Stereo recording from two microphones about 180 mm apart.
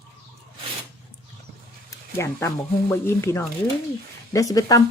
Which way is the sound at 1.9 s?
15° left (ahead or behind).